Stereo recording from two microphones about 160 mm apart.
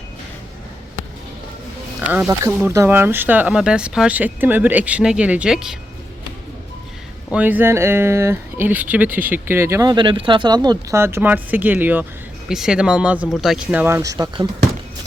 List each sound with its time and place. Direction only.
2.0 s speech: 10° right (ahead or behind)
7.3 s speech: 10° right (ahead or behind); by 11.0 s 25° right (ahead or behind)
11.0 s speech: 15° right (ahead or behind)